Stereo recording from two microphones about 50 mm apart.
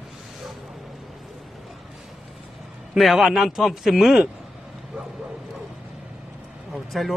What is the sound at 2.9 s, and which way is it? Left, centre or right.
A man's voice, centre.